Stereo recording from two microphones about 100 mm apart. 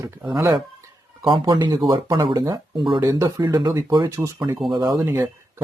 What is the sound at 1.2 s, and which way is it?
Speech, 55° right (ahead or behind).